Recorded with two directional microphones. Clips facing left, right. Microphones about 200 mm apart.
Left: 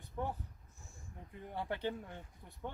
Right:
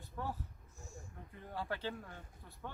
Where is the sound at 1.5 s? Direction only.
20° left (ahead or behind).